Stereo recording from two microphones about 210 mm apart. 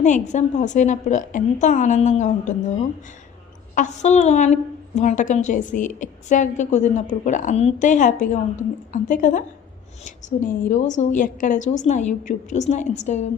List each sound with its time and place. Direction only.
0.0 s a woman's voice: 35° left (ahead or behind)